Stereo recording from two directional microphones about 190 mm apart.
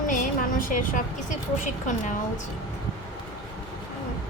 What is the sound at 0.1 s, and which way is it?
A woman's voice, 45° left (ahead or behind).